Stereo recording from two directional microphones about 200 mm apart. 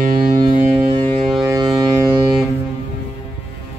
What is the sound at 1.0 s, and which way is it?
Ship, 5° left (ahead or behind).